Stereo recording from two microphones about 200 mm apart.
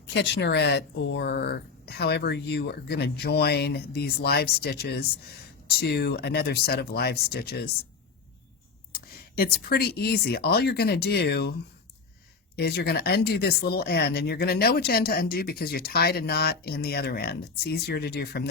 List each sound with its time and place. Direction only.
0.1 s speech: 60° left (ahead or behind)
8.9 s speech: 50° left (ahead or behind)
12.5 s speech: 55° left (ahead or behind)